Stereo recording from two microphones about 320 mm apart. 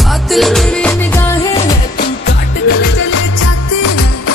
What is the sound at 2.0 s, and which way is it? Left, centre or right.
Music, left.